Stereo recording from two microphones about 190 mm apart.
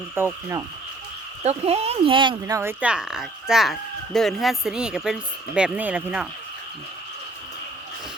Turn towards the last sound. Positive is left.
turn(degrees=-5)  # may be behind; listen again after turning